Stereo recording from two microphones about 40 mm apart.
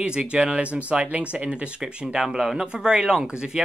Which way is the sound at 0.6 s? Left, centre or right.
Right.